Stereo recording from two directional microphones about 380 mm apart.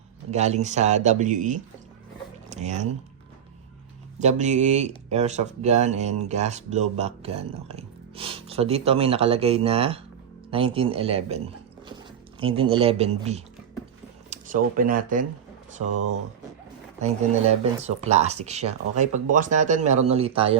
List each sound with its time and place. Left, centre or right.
0.3 s speech: centre
4.2 s speech: centre
15.9 s speech: right
17.0 s speech: centre